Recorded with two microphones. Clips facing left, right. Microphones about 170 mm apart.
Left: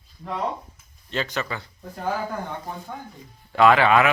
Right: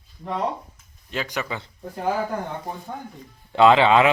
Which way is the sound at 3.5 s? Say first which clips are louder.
Right 2 dB; 20° right (ahead or behind).